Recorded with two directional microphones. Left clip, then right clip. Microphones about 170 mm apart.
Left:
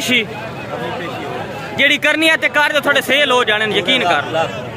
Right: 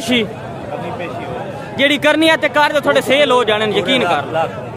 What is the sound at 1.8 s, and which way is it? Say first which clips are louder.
Speech: even; 15° right (ahead or behind).